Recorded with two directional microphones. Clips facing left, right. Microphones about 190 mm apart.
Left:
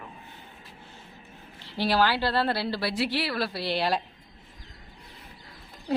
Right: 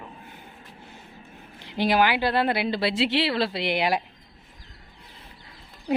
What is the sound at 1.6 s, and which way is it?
Speech, 15° right (ahead or behind).